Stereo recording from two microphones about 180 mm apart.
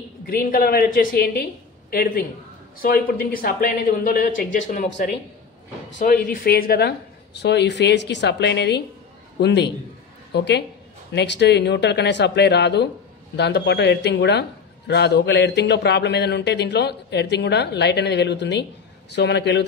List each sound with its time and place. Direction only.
0.3 s a woman's voice: 55° left (ahead or behind)
6.2 s a woman's voice: 55° left (ahead or behind); by 19.6 s 70° left (ahead or behind)